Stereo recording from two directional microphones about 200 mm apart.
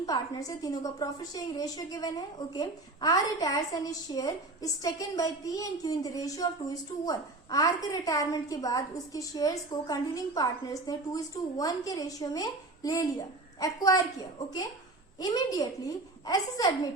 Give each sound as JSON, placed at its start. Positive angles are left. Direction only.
{"t": 0.0, "sound": "a woman's voice", "side_deg": 20}